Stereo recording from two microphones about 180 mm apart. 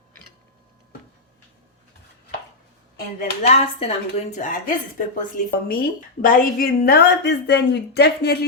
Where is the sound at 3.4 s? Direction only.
35° left (ahead or behind).